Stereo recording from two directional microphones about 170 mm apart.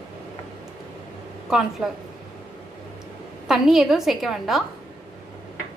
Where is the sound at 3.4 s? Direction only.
Centre (ahead or behind).